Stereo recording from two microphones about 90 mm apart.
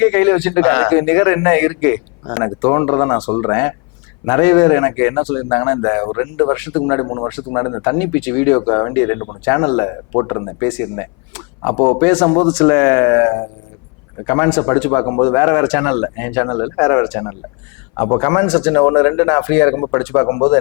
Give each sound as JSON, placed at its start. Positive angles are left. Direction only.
{"t": 0.0, "sound": "a man's voice", "side_deg": 15}
{"t": 12.3, "sound": "speech", "side_deg": 15}
{"t": 18.4, "sound": "a man's voice", "side_deg": 10}
{"t": 18.8, "sound": "speech", "side_deg": 25}